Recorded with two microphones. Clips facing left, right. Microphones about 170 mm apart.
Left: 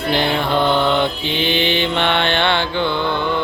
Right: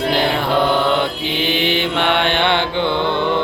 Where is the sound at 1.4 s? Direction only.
5° right (ahead or behind).